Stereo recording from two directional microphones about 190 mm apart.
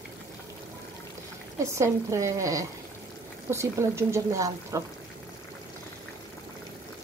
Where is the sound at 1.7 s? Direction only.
15° right (ahead or behind).